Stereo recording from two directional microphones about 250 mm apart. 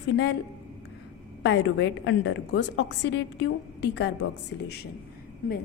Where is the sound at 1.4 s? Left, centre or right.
Left.